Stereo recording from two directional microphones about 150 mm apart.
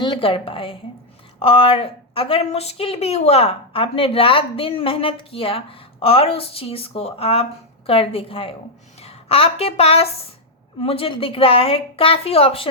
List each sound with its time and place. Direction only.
0.0 s a woman's voice: 35° left (ahead or behind)